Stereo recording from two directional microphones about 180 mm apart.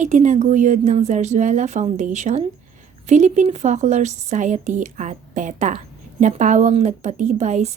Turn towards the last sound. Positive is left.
turn(degrees=-40)  # may be behind; listen again after turning